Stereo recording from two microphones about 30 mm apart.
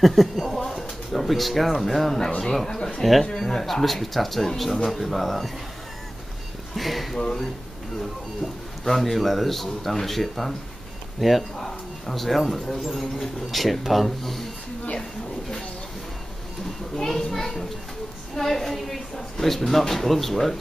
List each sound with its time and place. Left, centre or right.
0.0 s a sound: centre
2.4 s a woman's voice: centre
3.0 s a woman's voice: centre
6.7 s speech: centre
7.2 s speech: left
8.0 s a man's voice: centre
16.9 s a woman's voice: centre